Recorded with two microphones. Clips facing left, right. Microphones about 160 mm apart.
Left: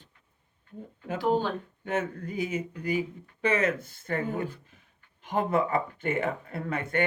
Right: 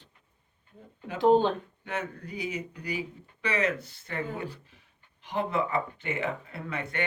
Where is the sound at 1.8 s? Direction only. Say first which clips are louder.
Left 5 dB; 45° left (ahead or behind).